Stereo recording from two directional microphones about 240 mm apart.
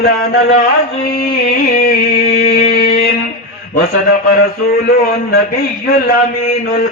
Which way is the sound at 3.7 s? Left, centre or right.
Left.